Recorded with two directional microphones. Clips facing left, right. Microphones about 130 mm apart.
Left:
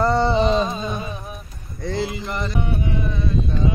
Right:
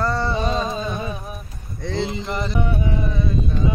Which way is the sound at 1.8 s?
Centre (ahead or behind).